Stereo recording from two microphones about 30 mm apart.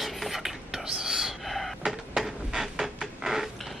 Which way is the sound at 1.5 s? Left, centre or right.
Centre.